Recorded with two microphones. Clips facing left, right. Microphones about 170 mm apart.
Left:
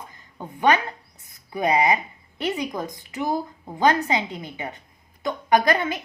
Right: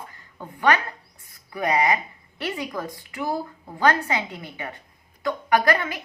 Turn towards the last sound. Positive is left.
turn(degrees=25)  # may be behind; listen again after turning